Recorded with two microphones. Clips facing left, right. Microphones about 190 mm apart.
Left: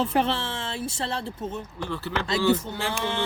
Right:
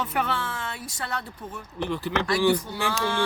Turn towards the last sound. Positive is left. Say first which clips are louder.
# right 2 dB
turn(degrees=20)  # may be behind; listen again after turning